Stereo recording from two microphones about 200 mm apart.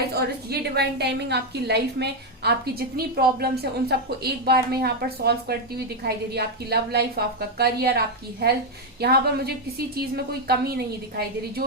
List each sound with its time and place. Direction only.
0.1 s a woman's voice: 55° right (ahead or behind)